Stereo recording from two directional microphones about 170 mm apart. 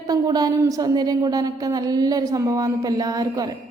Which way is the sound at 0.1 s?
25° right (ahead or behind).